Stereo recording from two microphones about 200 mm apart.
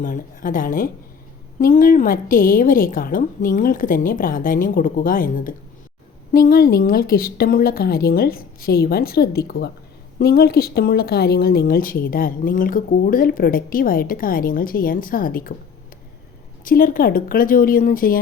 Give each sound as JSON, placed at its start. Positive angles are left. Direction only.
{"t": 0.0, "sound": "speech", "side_deg": 45}
{"t": 16.6, "sound": "speech", "side_deg": 45}